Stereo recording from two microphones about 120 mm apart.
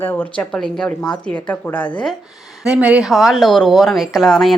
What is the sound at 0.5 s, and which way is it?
Speech, 5° left (ahead or behind).